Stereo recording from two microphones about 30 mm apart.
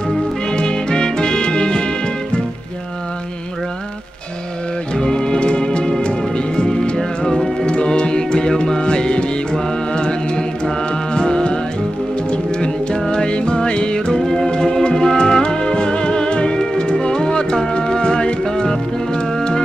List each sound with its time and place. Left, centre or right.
0.5 s music: left
4.9 s music: left
6.7 s music: centre
7.6 s music: left
14.5 s music: left